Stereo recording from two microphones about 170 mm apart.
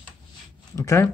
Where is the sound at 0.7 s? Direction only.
15° left (ahead or behind).